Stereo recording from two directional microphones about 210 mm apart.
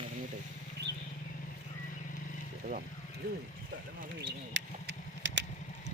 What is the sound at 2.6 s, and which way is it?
Speech, 45° right (ahead or behind).